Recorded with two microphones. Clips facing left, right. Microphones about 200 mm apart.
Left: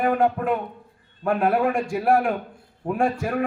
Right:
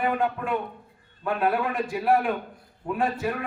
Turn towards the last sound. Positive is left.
turn(degrees=50)  # may be behind; listen again after turning